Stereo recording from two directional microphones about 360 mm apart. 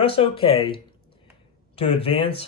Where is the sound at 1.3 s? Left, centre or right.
Centre.